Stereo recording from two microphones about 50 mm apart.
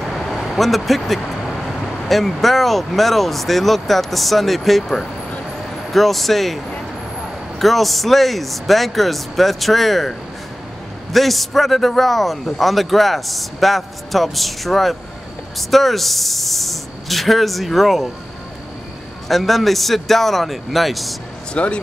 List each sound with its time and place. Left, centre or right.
0.0 s a man's voice: centre
19.2 s a man's voice: centre
21.6 s speech: left